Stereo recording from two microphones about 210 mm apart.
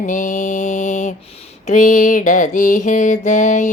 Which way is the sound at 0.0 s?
40° left (ahead or behind).